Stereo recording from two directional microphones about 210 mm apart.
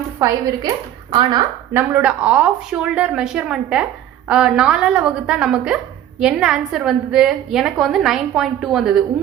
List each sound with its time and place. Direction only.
0.2 s a woman's voice: 15° right (ahead or behind)
1.7 s a woman's voice: 10° right (ahead or behind)